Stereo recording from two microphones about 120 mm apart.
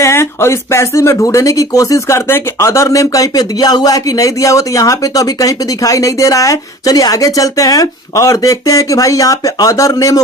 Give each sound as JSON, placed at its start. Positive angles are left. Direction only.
{"t": 0.0, "sound": "speech", "side_deg": 20}